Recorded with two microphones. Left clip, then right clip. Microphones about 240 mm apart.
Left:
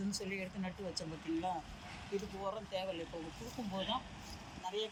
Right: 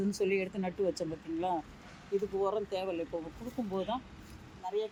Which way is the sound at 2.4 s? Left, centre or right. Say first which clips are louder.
Right 8 dB; right.